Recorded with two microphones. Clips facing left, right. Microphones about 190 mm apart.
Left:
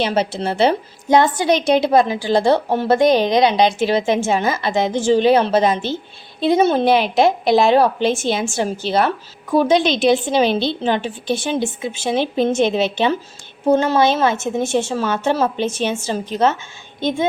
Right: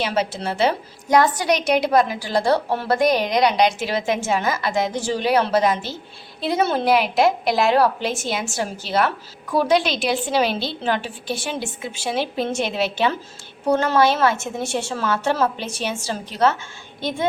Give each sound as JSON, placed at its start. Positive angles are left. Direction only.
{"t": 0.0, "sound": "a woman's voice", "side_deg": 30}